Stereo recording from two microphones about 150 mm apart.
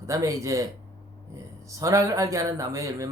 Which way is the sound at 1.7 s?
20° right (ahead or behind).